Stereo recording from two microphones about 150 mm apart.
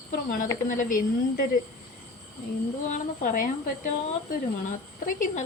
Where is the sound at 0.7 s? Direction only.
65° left (ahead or behind).